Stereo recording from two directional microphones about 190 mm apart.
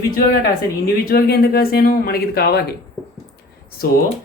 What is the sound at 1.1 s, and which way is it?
Speech, 55° left (ahead or behind).